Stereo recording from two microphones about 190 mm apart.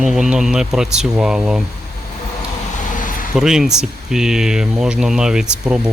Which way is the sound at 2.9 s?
45° left (ahead or behind).